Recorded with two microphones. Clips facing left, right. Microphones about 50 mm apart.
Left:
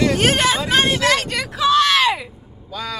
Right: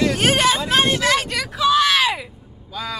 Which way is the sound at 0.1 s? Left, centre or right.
Centre.